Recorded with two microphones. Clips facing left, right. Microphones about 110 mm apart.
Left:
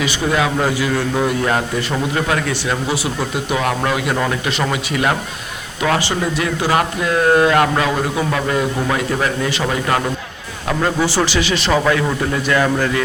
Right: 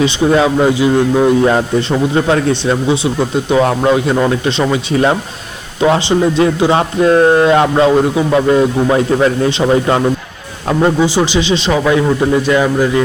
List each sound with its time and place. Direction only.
0.0 s speech: 30° right (ahead or behind)